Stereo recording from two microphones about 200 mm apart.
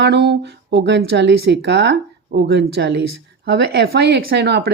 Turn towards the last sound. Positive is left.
turn(degrees=-55)  # may be behind; listen again after turning